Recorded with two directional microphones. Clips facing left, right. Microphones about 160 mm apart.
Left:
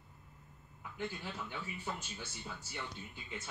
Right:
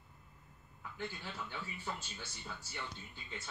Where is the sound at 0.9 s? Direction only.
20° left (ahead or behind).